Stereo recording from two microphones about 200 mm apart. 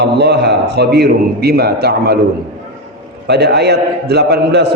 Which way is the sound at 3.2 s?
55° right (ahead or behind).